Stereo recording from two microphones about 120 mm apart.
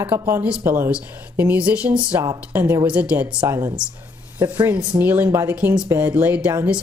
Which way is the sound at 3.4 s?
20° right (ahead or behind).